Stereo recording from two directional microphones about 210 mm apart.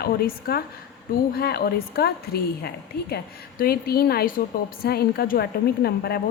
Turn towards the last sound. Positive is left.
turn(degrees=50)  # may be behind; listen again after turning